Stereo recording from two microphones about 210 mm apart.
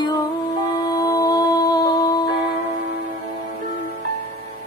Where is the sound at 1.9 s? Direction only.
20° left (ahead or behind).